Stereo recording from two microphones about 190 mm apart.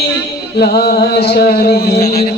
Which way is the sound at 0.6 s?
55° left (ahead or behind).